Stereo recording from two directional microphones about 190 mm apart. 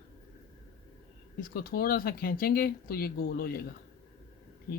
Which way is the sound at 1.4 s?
50° left (ahead or behind).